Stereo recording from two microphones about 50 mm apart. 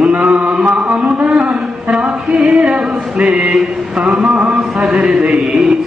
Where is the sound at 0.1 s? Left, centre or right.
Right.